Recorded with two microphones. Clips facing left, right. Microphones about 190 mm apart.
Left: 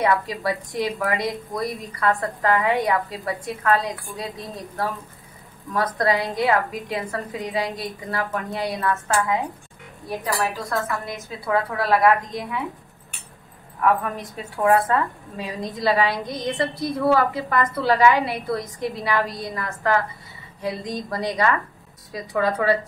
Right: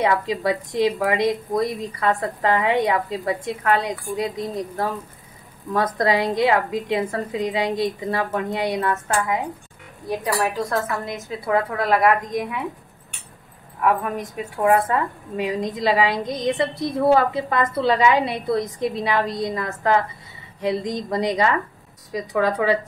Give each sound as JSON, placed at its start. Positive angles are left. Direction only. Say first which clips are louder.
{"t": 0.0, "sound": "a woman's voice", "louder": "right 1 dB", "side_deg": -20}
{"t": 5.9, "sound": "a woman's voice", "louder": "right 2 dB", "side_deg": -20}
{"t": 14.5, "sound": "a woman's voice", "louder": "even", "side_deg": -20}